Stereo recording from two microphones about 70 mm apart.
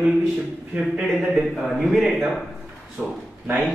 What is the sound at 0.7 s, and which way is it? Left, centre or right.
Speech, centre.